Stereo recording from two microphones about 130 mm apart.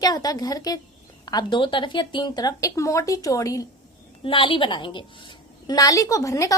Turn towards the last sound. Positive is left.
turn(degrees=25)  # may be behind; listen again after turning